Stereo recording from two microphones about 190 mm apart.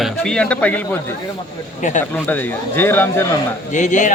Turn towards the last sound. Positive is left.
turn(degrees=40)  # may be behind; listen again after turning